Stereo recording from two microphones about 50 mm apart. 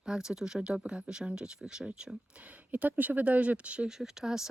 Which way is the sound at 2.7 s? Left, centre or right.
Right.